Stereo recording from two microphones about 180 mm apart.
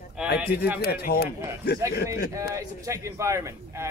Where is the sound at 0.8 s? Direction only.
60° left (ahead or behind).